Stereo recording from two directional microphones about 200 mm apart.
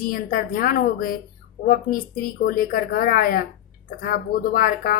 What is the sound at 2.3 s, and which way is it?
A woman's voice, 45° left (ahead or behind).